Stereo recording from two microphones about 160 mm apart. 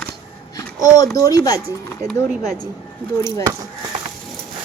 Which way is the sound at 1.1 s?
20° left (ahead or behind).